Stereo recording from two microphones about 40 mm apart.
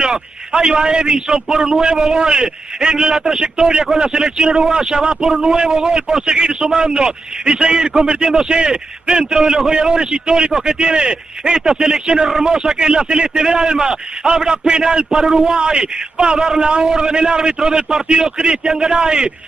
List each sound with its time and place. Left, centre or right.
0.0 s a man's voice: centre
1.8 s a man's voice: centre
2.2 s a man's voice: centre
11.5 s a man's voice: centre
12.5 s a man's voice: centre
15.5 s a man's voice: centre
16.8 s a man's voice: centre